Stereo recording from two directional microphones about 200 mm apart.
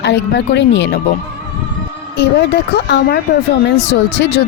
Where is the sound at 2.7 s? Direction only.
55° left (ahead or behind).